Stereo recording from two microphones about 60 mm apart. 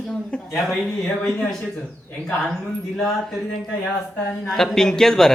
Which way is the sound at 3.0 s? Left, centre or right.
Centre.